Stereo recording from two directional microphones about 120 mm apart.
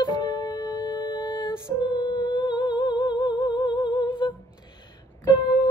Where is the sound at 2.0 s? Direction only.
35° left (ahead or behind).